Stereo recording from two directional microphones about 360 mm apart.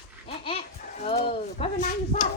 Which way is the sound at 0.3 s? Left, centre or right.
Centre.